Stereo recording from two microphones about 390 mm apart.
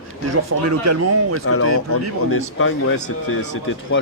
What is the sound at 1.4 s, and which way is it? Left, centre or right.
Speech, left.